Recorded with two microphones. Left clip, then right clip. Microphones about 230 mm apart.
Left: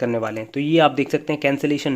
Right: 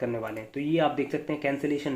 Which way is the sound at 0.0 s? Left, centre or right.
Left.